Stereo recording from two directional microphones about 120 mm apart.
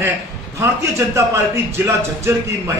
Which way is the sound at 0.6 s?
25° right (ahead or behind).